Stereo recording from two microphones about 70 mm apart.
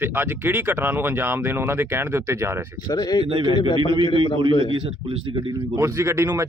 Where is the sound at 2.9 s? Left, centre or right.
Left.